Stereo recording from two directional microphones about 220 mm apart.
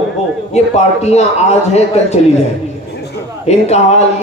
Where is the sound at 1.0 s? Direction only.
30° left (ahead or behind).